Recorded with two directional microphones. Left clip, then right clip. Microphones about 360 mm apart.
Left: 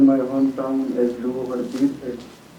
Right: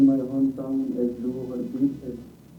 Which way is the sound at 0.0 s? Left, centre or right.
Centre.